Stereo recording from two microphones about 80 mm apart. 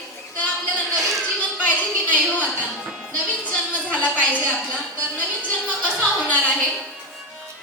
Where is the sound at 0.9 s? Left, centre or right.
Centre.